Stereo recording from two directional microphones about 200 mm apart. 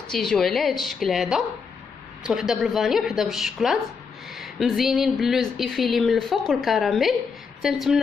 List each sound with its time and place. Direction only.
0.1 s speech: centre (ahead or behind)